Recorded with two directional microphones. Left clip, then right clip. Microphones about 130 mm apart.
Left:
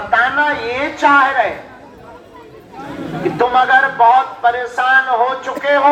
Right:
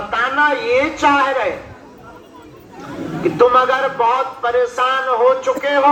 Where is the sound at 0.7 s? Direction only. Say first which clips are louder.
Left 1 dB; 25° left (ahead or behind).